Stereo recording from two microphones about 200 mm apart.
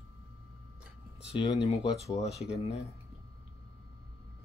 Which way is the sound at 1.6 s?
30° left (ahead or behind).